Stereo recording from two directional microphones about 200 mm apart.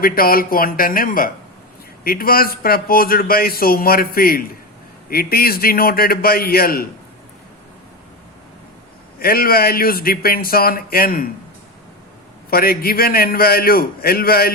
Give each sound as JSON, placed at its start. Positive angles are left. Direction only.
{"t": 0.0, "sound": "a man's voice", "side_deg": 45}
{"t": 9.1, "sound": "a man's voice", "side_deg": 50}
{"t": 12.5, "sound": "a man's voice", "side_deg": 50}